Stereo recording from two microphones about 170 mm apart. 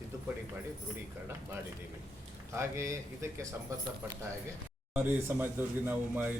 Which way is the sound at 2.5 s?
15° right (ahead or behind).